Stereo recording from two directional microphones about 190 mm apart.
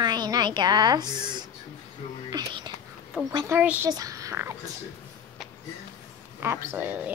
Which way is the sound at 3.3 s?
10° right (ahead or behind).